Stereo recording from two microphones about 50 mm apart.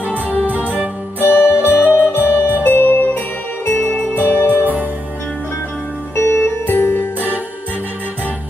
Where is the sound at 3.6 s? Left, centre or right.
Left.